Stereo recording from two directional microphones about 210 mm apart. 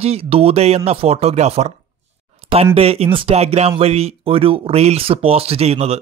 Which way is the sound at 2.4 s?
25° right (ahead or behind).